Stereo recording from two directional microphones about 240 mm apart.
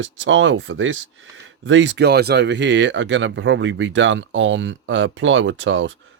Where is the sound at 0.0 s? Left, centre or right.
Right.